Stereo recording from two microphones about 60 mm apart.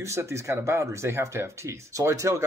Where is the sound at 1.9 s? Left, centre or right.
Right.